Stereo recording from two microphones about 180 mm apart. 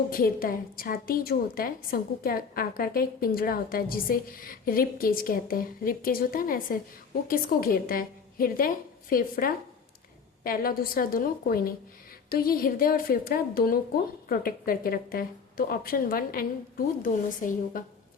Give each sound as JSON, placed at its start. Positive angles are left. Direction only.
{"t": 0.1, "sound": "a woman's voice", "side_deg": 50}